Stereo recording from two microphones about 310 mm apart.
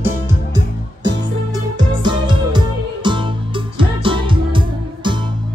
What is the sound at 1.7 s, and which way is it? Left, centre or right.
Music, centre.